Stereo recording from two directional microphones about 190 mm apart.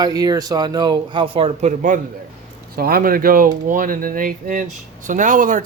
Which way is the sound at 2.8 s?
50° right (ahead or behind).